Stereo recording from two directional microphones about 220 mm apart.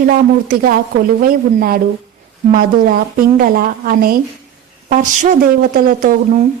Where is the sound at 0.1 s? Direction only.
40° right (ahead or behind).